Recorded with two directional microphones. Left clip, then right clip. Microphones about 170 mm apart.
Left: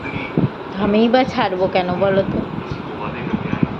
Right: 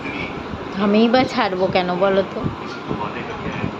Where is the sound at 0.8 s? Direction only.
Centre (ahead or behind).